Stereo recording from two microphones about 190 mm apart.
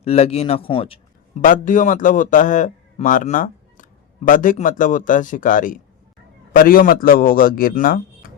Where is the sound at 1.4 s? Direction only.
45° left (ahead or behind).